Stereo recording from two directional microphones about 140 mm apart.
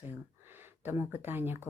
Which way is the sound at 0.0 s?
15° right (ahead or behind).